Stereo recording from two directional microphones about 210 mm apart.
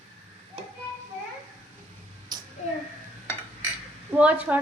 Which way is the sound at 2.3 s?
20° right (ahead or behind).